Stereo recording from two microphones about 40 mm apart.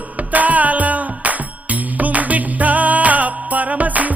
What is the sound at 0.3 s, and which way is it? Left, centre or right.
Music, right.